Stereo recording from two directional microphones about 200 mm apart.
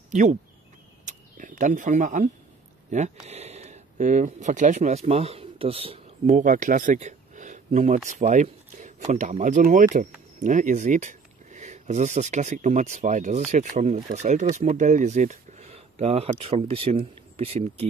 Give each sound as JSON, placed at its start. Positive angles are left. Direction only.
{"t": 0.1, "sound": "speech", "side_deg": -40}
{"t": 1.0, "sound": "a sound", "side_deg": -40}
{"t": 2.9, "sound": "speech", "side_deg": -35}